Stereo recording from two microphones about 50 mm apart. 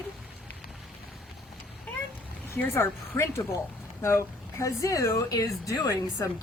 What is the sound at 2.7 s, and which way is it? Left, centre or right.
Speech, left.